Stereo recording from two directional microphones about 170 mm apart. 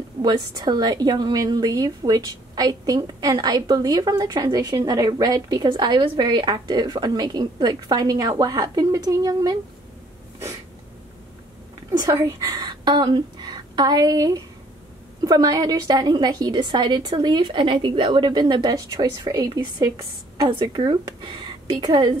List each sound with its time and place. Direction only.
0.2 s a woman's voice: 25° right (ahead or behind)
12.0 s a woman's voice: 20° right (ahead or behind)